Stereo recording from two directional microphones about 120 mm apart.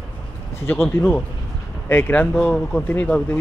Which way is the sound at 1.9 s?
15° left (ahead or behind).